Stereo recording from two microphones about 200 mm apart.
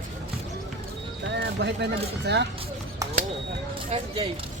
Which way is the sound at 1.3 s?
55° right (ahead or behind).